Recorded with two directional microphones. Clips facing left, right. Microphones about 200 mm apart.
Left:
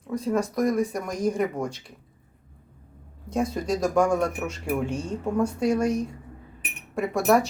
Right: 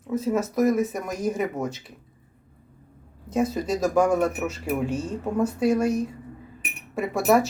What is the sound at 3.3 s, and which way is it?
Speech, 5° right (ahead or behind).